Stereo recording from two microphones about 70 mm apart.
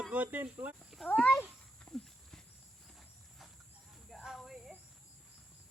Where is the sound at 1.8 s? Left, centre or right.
Centre.